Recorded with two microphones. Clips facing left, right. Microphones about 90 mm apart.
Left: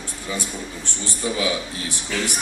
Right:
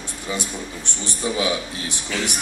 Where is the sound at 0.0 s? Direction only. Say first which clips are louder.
Right 1 dB; 20° right (ahead or behind).